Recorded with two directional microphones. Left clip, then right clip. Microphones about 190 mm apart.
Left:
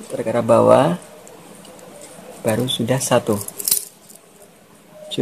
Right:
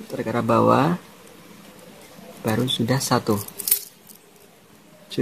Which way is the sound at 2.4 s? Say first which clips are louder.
Left 3 dB; 45° right (ahead or behind).